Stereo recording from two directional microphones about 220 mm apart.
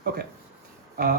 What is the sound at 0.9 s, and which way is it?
Speech, 45° right (ahead or behind).